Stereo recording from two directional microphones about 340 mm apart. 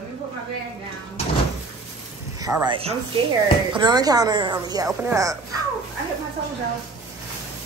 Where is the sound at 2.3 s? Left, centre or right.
Centre.